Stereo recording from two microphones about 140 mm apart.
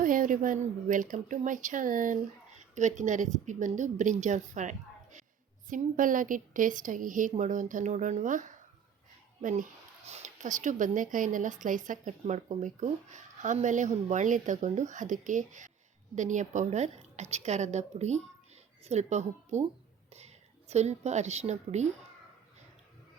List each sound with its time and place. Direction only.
0.0 s a woman's voice: 75° right (ahead or behind)
2.7 s speech: 60° right (ahead or behind)
5.6 s a woman's voice: 70° right (ahead or behind)
10.1 s a woman's voice: 55° right (ahead or behind)